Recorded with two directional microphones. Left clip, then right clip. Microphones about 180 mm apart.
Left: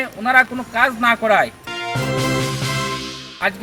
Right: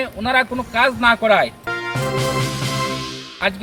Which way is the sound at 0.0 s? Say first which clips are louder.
Left 3 dB; 5° right (ahead or behind).